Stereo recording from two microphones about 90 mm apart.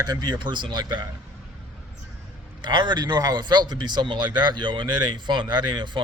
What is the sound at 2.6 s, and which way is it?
Speech, 60° right (ahead or behind).